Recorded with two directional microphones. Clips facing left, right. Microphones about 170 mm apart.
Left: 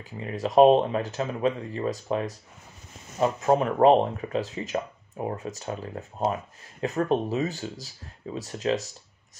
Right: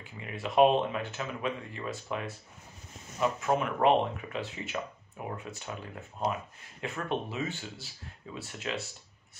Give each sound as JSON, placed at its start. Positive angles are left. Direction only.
{"t": 0.0, "sound": "speech", "side_deg": 35}